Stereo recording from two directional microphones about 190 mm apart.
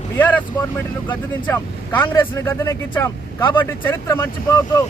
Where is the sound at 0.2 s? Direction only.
10° left (ahead or behind).